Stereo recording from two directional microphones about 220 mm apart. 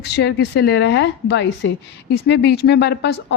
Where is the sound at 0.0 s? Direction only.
50° left (ahead or behind).